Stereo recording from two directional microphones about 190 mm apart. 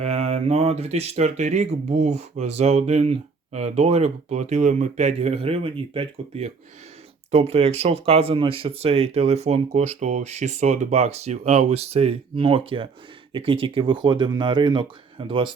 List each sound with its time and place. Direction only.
0.0 s speech: 35° right (ahead or behind)